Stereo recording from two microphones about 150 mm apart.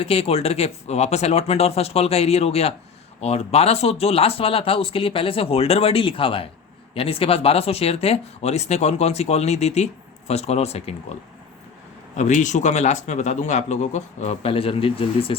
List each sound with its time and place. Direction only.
0.0 s speech: 40° left (ahead or behind)
12.1 s speech: 50° left (ahead or behind)